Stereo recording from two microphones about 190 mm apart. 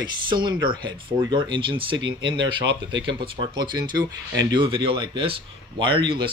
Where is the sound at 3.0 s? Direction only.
25° right (ahead or behind).